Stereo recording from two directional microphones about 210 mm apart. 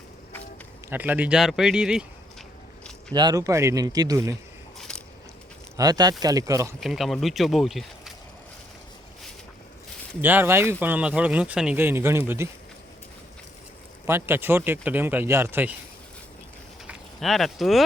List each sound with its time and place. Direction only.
0.9 s speech: 10° right (ahead or behind)
3.1 s speech: 20° right (ahead or behind)
4.9 s biting: 5° left (ahead or behind)
5.7 s speech: 20° right (ahead or behind)
6.7 s speech: centre (ahead or behind)
10.2 s speech: 10° right (ahead or behind)
14.1 s speech: 10° right (ahead or behind)
16.8 s speech: centre (ahead or behind)